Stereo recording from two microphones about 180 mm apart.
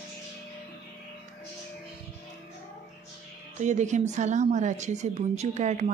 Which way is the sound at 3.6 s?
40° right (ahead or behind).